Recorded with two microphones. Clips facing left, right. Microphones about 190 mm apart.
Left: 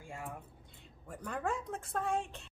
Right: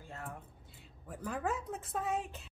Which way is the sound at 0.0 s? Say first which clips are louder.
Left 1 dB; 10° left (ahead or behind).